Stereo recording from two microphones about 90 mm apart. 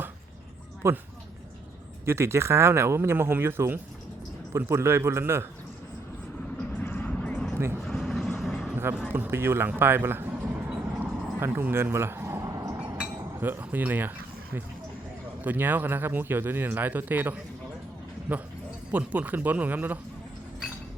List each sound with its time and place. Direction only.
0.8 s speech: 30° right (ahead or behind)
2.0 s speech: 30° right (ahead or behind)
6.8 s vehicle: 20° left (ahead or behind); by 8.7 s centre (ahead or behind)
8.7 s a sound: 25° right (ahead or behind)
9.1 s speech: 25° right (ahead or behind)
11.0 s a sound: 25° right (ahead or behind)
13.4 s speech: 20° right (ahead or behind)
15.4 s speech: 20° right (ahead or behind)
18.9 s speech: 15° right (ahead or behind)